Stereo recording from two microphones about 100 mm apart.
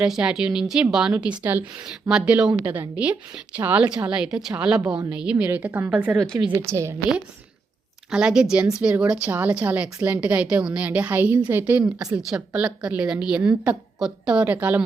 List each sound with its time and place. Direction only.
0.0 s a woman's voice: 10° right (ahead or behind)
6.5 s a woman's voice: 25° right (ahead or behind)
8.1 s a woman's voice: 10° right (ahead or behind)
11.8 s a woman's voice: 10° right (ahead or behind)